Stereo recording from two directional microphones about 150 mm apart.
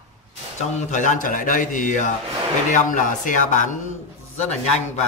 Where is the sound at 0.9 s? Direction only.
55° left (ahead or behind).